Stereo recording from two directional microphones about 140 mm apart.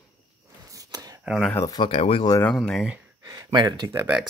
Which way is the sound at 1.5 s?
25° left (ahead or behind).